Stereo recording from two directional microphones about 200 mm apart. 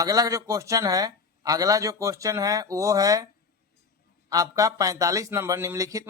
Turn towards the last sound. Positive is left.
turn(degrees=-15)  # may be behind; listen again after turning